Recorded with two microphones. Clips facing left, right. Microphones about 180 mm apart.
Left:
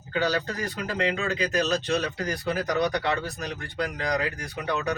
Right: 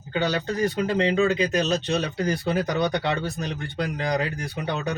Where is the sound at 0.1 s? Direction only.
25° right (ahead or behind).